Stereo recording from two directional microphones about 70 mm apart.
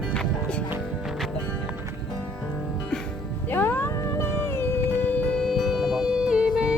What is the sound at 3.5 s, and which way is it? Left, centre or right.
Music, left.